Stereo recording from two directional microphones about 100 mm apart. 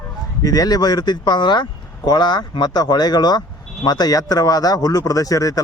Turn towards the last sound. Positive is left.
turn(degrees=35)  # may be behind; listen again after turning